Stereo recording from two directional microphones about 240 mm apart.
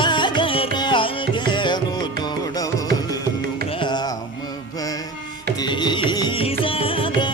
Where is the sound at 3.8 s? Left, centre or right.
Centre.